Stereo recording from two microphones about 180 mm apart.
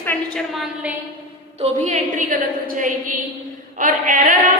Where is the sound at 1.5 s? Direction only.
35° right (ahead or behind).